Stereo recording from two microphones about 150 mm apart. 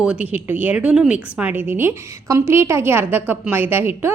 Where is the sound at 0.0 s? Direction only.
10° right (ahead or behind).